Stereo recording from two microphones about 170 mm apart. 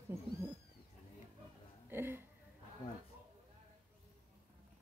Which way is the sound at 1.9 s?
15° right (ahead or behind).